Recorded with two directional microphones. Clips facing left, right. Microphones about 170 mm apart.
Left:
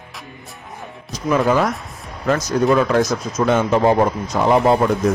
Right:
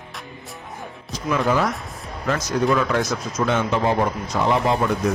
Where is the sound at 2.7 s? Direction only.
40° left (ahead or behind).